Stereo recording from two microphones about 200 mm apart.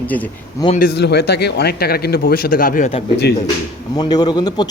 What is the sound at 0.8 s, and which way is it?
Speech, 55° left (ahead or behind).